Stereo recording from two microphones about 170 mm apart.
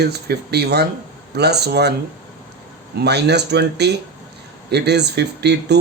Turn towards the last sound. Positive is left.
turn(degrees=-80)